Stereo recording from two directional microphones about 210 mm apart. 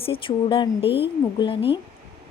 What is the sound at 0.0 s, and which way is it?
A woman's voice, 25° left (ahead or behind).